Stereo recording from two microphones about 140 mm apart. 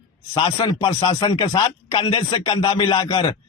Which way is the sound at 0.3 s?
35° left (ahead or behind).